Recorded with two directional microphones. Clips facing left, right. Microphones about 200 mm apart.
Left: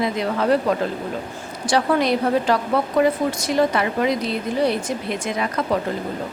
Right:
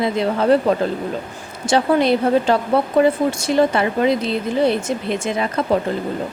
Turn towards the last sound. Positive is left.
turn(degrees=-25)  # may be behind; listen again after turning